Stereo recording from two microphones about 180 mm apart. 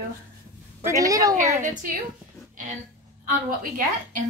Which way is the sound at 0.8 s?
20° right (ahead or behind).